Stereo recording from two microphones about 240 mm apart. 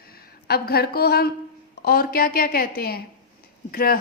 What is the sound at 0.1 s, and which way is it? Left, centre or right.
A woman's voice, left.